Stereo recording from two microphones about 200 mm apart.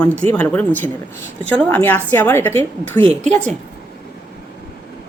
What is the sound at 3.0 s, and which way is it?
Speech, 30° right (ahead or behind).